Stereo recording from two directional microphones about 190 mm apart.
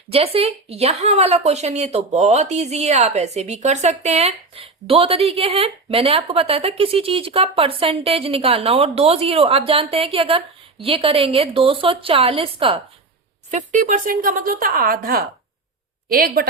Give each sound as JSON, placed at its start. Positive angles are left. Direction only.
{"t": 0.1, "sound": "speech", "side_deg": -30}
{"t": 13.5, "sound": "speech", "side_deg": -40}